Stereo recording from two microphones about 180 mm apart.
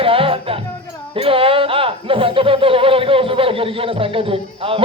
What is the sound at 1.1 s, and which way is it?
Speech, 30° right (ahead or behind).